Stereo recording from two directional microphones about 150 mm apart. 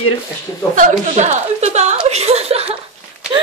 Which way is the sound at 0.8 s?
55° right (ahead or behind).